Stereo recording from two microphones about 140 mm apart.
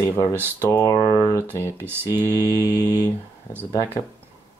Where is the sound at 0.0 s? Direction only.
20° left (ahead or behind).